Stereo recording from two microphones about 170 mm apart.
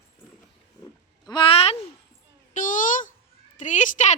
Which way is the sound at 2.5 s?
50° left (ahead or behind).